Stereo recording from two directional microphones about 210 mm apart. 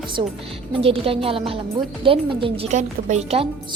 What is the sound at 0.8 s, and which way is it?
A woman's voice, 25° right (ahead or behind).